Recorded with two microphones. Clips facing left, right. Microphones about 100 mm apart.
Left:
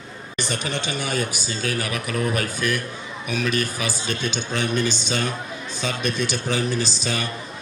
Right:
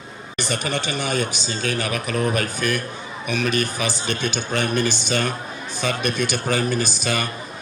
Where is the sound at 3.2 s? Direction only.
60° right (ahead or behind).